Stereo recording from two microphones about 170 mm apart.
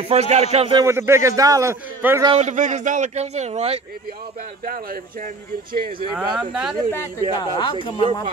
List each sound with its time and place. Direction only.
0.1 s a man's voice: 40° right (ahead or behind)
0.7 s a man's voice: 15° right (ahead or behind)
2.3 s a man's voice: 45° right (ahead or behind)
4.6 s speech: 60° right (ahead or behind)
6.1 s speech: 5° right (ahead or behind)
6.9 s speech: 20° left (ahead or behind)